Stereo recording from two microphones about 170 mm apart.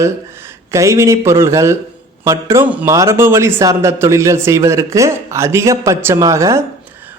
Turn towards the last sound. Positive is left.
turn(degrees=-15)  # may be behind; listen again after turning